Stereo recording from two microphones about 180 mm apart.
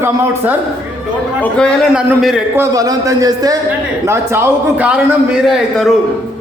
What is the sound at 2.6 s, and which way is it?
A man's voice, 20° right (ahead or behind).